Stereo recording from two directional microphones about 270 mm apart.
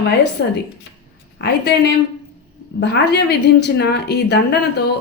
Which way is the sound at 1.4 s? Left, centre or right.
Left.